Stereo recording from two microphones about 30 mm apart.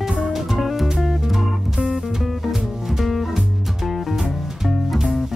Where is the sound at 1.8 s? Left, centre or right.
Centre.